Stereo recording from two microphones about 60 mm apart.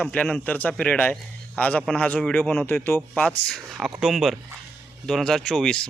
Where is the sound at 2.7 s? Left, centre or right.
Left.